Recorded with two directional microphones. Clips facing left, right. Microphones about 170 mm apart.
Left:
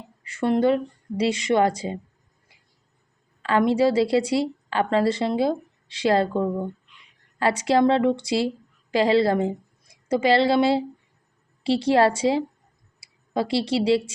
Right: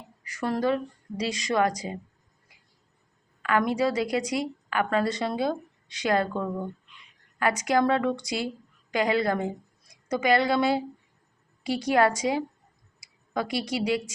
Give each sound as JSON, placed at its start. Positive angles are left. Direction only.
{"t": 0.3, "sound": "a woman's voice", "side_deg": 25}
{"t": 2.5, "sound": "a sound", "side_deg": 25}
{"t": 3.4, "sound": "a woman's voice", "side_deg": 30}